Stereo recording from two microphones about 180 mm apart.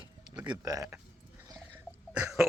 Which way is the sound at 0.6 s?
20° right (ahead or behind).